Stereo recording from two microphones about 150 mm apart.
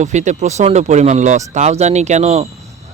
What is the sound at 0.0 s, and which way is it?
Speech, 50° right (ahead or behind).